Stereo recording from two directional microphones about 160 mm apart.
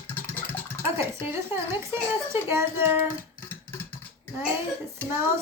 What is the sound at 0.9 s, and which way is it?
A woman's voice, 15° right (ahead or behind).